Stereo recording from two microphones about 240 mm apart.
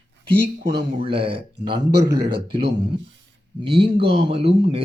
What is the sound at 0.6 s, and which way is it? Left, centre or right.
Speech, right.